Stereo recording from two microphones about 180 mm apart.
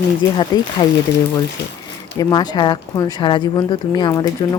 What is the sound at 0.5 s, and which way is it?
Speech, 25° left (ahead or behind).